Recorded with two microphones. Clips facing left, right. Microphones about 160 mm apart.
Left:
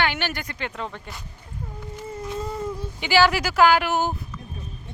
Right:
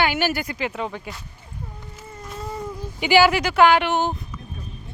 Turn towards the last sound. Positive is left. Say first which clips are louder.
# right 2 dB
turn(degrees=5)  # may be behind; listen again after turning